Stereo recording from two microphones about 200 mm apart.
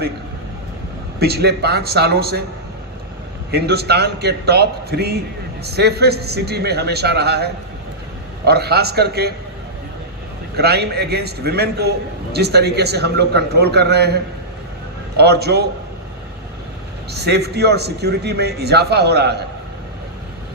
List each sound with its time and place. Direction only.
1.2 s a man's voice: 55° right (ahead or behind)
3.5 s a man's voice: 55° right (ahead or behind)
10.5 s a man's voice: 55° right (ahead or behind)
17.1 s a man's voice: 55° right (ahead or behind)